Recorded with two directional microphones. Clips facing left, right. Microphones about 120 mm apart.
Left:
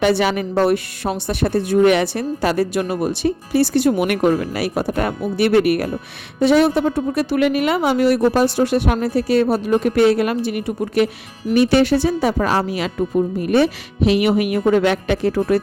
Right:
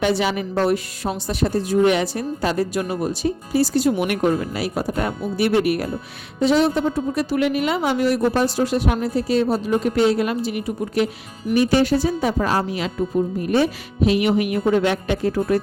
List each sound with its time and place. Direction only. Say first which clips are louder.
0.0 s a woman's voice: left 3 dB; 65° left (ahead or behind)